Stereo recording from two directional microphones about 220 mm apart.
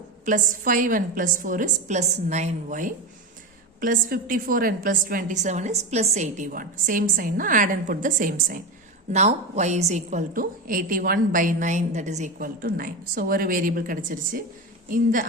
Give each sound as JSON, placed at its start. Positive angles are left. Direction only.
{"t": 0.3, "sound": "a woman's voice", "side_deg": -35}